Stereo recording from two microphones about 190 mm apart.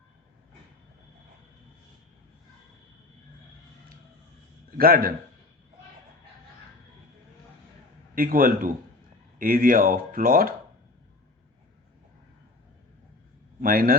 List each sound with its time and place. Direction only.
4.8 s speech: 50° right (ahead or behind)
8.1 s speech: 50° right (ahead or behind)
13.6 s a man's voice: 50° right (ahead or behind)